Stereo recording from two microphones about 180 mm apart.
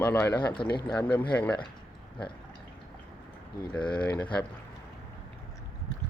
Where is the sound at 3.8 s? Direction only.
25° left (ahead or behind).